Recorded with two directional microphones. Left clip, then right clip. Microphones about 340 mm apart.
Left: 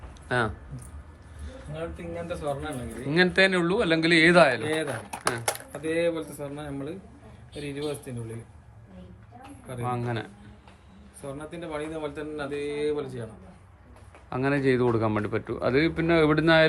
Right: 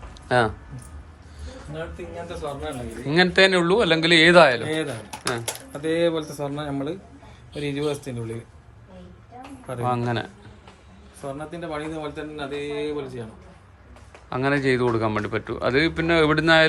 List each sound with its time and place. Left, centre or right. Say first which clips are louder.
0.3 s speech: right 6 dB; centre
3.1 s speech: right 4 dB; centre
5.8 s speech: right 4 dB; centre
9.8 s speech: right 6 dB; centre
11.6 s speech: right 2 dB; centre
14.3 s speech: right 3 dB; centre